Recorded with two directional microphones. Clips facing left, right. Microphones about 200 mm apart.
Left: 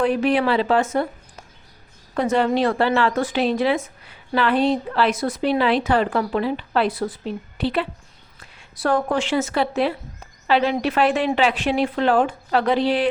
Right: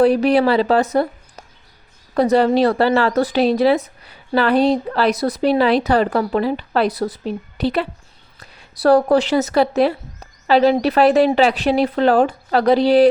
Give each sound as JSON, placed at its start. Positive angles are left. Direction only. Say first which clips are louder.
{"t": 0.0, "sound": "a woman's voice", "louder": "right 5 dB", "side_deg": -35}